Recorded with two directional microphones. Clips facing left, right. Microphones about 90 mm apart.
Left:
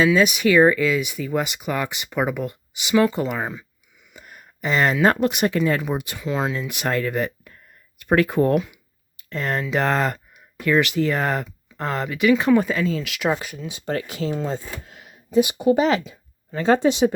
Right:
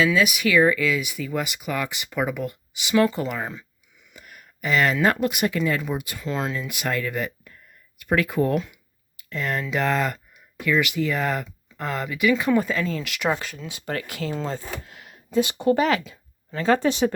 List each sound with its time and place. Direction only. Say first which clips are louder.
0.0 s speech: left 3 dB; 30° left (ahead or behind)
4.1 s a sound: left 2 dB; 30° left (ahead or behind)
5.0 s speech: left 3 dB; 25° left (ahead or behind)
6.1 s speech: left 4 dB; 10° left (ahead or behind)
6.6 s speech: left 3 dB; 25° left (ahead or behind)
8.5 s speech: left 4 dB; 10° left (ahead or behind)
9.1 s speech: left 2 dB; 35° left (ahead or behind); by 13.0 s 15° left (ahead or behind)
13.0 s speech: left 2 dB; 5° left (ahead or behind)
13.7 s speech: left 4 dB; 25° left (ahead or behind)